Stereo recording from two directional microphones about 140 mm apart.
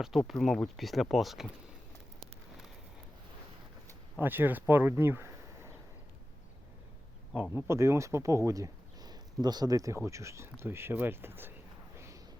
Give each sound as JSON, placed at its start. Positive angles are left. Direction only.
{"t": 0.0, "sound": "speech", "side_deg": 0}
{"t": 4.2, "sound": "speech", "side_deg": -15}
{"t": 7.5, "sound": "speech", "side_deg": -20}
{"t": 11.9, "sound": "a sound", "side_deg": -20}